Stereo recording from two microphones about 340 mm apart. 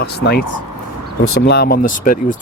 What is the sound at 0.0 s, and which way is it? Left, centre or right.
Speech, left.